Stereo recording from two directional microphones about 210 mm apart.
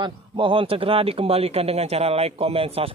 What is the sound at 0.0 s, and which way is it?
A man's voice, 25° right (ahead or behind).